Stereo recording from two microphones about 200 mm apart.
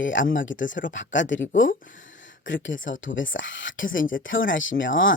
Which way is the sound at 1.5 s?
40° left (ahead or behind).